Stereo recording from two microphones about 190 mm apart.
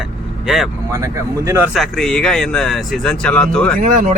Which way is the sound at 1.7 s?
Centre (ahead or behind).